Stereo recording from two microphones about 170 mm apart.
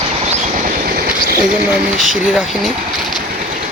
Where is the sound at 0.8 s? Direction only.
60° right (ahead or behind).